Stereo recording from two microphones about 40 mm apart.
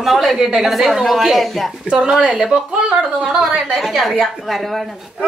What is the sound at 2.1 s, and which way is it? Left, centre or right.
Speech, centre.